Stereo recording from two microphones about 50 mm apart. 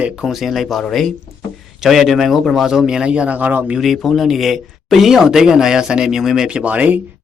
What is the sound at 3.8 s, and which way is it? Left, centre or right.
Speech, centre.